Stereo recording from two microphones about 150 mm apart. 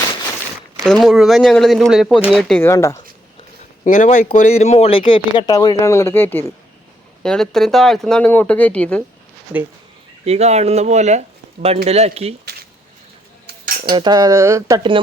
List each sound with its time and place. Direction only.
0.9 s speech: centre (ahead or behind)
2.5 s speech: 15° left (ahead or behind)
3.8 s speech: 60° left (ahead or behind); by 9.0 s 10° left (ahead or behind)
10.2 s speech: 45° right (ahead or behind)
13.5 s cutlery: 90° right
13.9 s speech: 30° right (ahead or behind)